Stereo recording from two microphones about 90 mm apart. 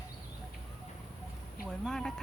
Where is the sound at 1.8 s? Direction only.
5° left (ahead or behind).